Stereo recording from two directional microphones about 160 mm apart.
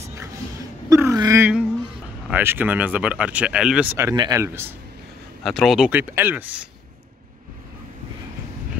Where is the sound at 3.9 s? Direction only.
20° right (ahead or behind).